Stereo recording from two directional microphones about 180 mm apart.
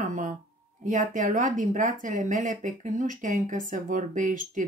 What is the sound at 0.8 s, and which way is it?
Speech, 45° right (ahead or behind).